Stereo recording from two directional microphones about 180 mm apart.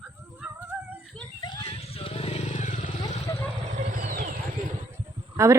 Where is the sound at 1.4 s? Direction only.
25° left (ahead or behind); by 2.9 s 45° left (ahead or behind).